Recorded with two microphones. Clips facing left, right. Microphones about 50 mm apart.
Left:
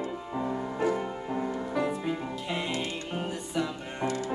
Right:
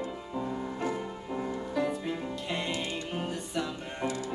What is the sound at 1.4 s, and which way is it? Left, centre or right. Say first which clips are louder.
Music: left 1 dB; centre.